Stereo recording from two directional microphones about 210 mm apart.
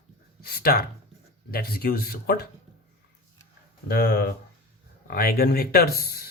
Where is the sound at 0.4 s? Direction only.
45° left (ahead or behind).